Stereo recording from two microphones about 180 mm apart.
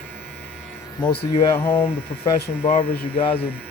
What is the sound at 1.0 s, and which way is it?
Speech, 30° left (ahead or behind).